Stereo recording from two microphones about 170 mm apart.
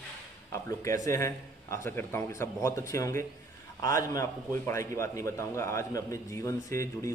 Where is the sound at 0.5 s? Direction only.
20° left (ahead or behind).